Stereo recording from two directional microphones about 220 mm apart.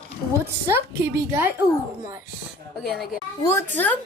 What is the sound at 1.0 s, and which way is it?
Speech, 15° right (ahead or behind).